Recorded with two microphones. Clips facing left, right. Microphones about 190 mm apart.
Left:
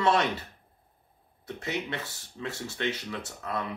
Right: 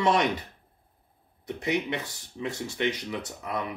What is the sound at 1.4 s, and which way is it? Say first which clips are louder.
Speech: right 5 dB; 15° right (ahead or behind).